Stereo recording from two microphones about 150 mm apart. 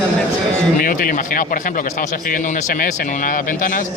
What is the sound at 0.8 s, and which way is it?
A man's voice, 70° left (ahead or behind).